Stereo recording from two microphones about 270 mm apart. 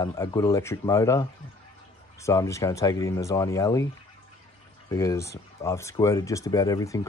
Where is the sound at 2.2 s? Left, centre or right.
Centre.